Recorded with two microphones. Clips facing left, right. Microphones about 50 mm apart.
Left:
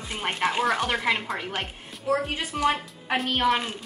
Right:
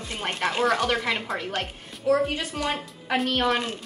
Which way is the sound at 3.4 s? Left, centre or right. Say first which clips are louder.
Left 1 dB; centre.